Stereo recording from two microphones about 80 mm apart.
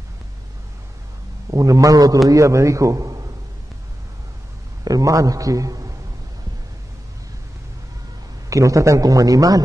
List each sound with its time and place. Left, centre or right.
1.5 s a man's voice: right
4.8 s a man's voice: right
8.5 s a man's voice: right